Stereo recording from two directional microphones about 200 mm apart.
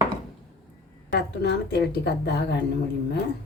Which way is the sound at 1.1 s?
55° left (ahead or behind).